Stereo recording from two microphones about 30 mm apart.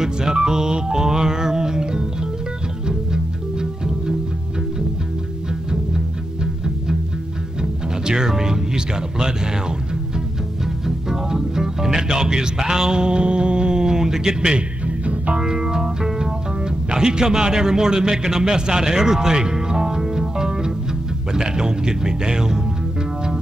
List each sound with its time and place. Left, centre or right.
0.0 s music: right
5.7 s music: right
8.0 s speech: right
15.0 s music: right
15.4 s music: right
16.9 s a man's voice: right